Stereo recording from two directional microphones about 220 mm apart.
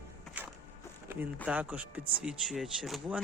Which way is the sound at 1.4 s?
5° right (ahead or behind).